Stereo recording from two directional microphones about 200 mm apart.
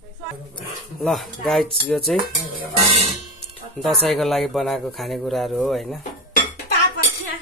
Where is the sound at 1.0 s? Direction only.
Centre (ahead or behind).